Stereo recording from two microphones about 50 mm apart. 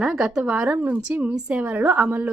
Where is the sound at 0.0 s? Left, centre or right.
Centre.